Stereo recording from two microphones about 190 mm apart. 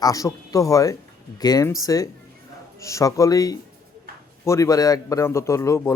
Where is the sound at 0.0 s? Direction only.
20° left (ahead or behind).